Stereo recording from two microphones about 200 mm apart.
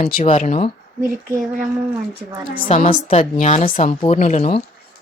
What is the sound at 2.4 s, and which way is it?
A woman's voice, 45° left (ahead or behind).